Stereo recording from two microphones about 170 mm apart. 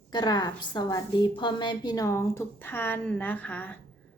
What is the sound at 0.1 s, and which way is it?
A woman's voice, 25° left (ahead or behind).